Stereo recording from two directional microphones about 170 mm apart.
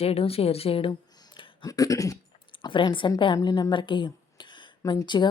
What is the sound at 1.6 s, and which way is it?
A woman's voice, 20° left (ahead or behind).